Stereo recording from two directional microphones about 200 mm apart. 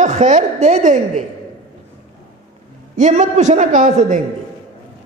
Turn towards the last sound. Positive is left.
turn(degrees=-40)  # may be behind; listen again after turning